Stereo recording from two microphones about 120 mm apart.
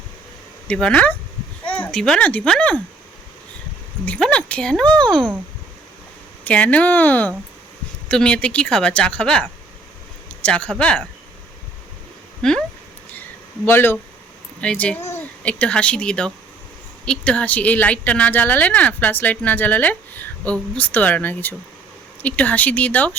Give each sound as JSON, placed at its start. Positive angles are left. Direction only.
{"t": 0.7, "sound": "speech", "side_deg": 10}
{"t": 4.0, "sound": "speech", "side_deg": 10}
{"t": 6.4, "sound": "speech", "side_deg": 10}
{"t": 12.4, "sound": "a sound", "side_deg": 5}
{"t": 13.7, "sound": "speech", "side_deg": 15}